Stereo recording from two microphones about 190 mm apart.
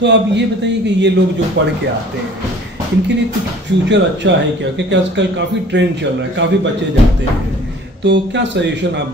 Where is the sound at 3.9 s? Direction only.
70° right (ahead or behind).